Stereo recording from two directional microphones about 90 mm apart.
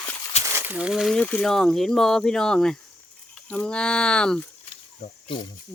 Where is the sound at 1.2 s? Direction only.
15° left (ahead or behind).